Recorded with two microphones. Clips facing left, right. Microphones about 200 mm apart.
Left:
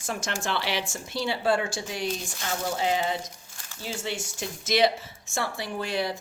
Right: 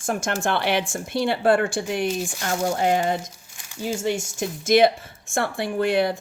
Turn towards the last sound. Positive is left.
turn(degrees=-60)  # may be behind; listen again after turning